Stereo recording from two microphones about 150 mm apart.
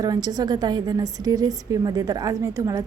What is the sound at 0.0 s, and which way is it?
A woman's voice, 25° right (ahead or behind).